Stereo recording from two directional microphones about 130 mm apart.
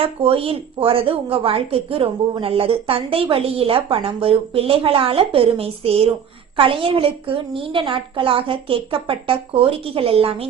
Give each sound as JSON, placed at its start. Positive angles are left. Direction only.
{"t": 0.0, "sound": "a woman's voice", "side_deg": -45}